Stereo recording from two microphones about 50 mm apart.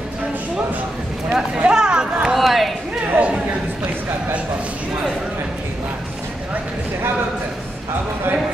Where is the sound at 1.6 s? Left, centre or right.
Centre.